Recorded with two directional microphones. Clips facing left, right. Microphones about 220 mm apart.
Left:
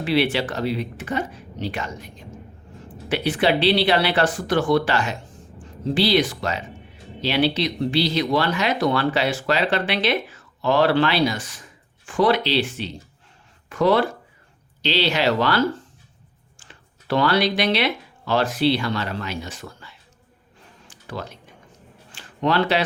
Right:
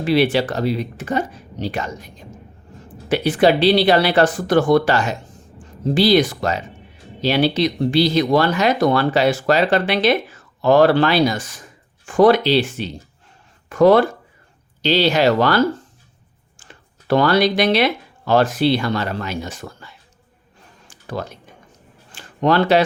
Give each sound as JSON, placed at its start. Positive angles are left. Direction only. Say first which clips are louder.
{"t": 0.0, "sound": "speech", "louder": "right 4 dB", "side_deg": -40}
{"t": 3.1, "sound": "speech", "louder": "right 5 dB", "side_deg": -40}
{"t": 20.9, "sound": "typing", "louder": "right 5 dB", "side_deg": -45}
{"t": 22.1, "sound": "a sound", "louder": "right 4 dB", "side_deg": -45}